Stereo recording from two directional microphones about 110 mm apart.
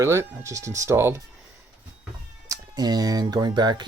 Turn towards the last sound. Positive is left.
turn(degrees=-40)  # may be behind; listen again after turning